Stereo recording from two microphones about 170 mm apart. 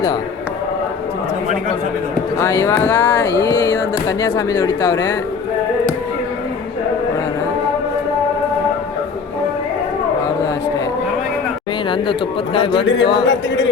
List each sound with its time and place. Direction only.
2.4 s speech: 15° left (ahead or behind)
13.0 s speech: 25° left (ahead or behind)